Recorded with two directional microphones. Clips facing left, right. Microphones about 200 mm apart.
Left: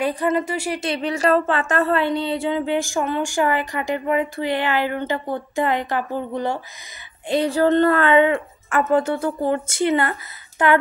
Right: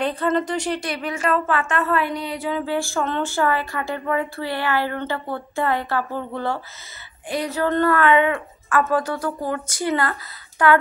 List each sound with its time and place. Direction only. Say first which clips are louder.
0.0 s speech: left 1 dB; 10° left (ahead or behind)
0.7 s speech: left 3 dB; 25° left (ahead or behind)
7.2 s a woman's voice: left 5 dB; 30° left (ahead or behind)